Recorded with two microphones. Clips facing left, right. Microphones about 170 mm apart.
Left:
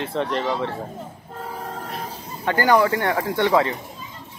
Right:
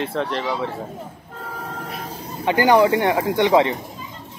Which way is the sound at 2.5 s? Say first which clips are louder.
Right 3 dB; 20° right (ahead or behind).